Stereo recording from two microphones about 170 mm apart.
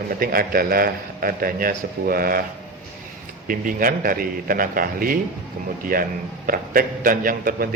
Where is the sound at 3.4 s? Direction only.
55° right (ahead or behind).